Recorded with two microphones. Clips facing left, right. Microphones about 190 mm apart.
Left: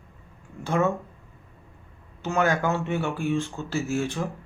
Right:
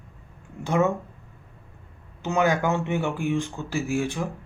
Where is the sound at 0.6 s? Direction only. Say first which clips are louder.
Right 1 dB; 15° right (ahead or behind).